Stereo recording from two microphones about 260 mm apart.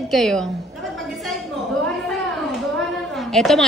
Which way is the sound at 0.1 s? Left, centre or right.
Centre.